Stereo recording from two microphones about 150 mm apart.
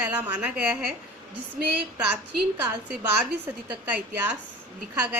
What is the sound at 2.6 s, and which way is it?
A woman's voice, 10° right (ahead or behind).